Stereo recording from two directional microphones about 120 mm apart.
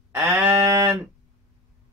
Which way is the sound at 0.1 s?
20° right (ahead or behind).